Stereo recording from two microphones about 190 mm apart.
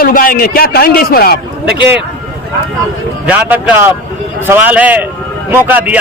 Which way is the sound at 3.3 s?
10° right (ahead or behind).